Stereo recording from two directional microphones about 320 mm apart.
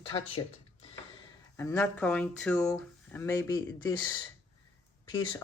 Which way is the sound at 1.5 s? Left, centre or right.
Centre.